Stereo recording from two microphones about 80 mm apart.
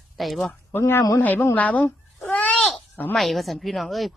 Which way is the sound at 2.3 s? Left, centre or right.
Centre.